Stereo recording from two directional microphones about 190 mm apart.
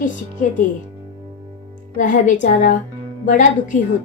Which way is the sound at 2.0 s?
45° left (ahead or behind).